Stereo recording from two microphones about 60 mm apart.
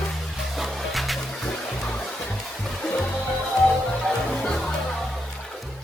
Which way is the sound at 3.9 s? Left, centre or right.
Centre.